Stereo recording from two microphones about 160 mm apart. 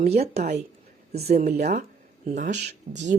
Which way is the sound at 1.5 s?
45° right (ahead or behind).